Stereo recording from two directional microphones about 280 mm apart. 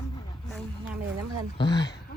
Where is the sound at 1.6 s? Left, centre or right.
Left.